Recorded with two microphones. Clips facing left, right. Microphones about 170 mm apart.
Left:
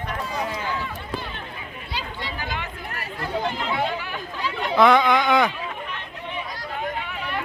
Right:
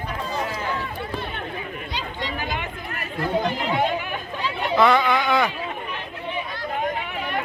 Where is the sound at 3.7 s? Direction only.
15° right (ahead or behind).